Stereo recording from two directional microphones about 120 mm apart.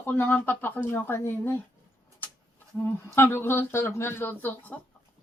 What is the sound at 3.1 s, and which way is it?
Speech, 20° left (ahead or behind).